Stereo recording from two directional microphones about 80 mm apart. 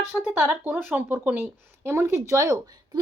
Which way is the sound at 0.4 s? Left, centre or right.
Right.